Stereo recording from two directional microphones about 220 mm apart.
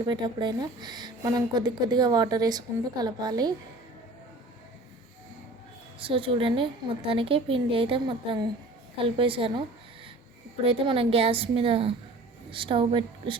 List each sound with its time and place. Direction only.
0.0 s a woman's voice: 20° right (ahead or behind)
6.0 s a woman's voice: 25° right (ahead or behind)
10.7 s a woman's voice: 25° right (ahead or behind)